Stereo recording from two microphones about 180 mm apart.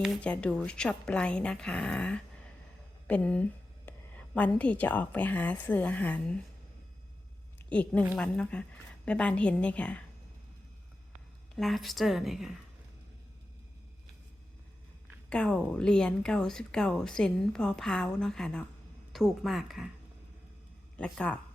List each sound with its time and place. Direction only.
0.0 s a woman's voice: 5° left (ahead or behind)
7.7 s a woman's voice: 5° left (ahead or behind)
11.5 s a woman's voice: centre (ahead or behind)
15.0 s a woman's voice: 5° left (ahead or behind)
21.0 s a woman's voice: 5° left (ahead or behind)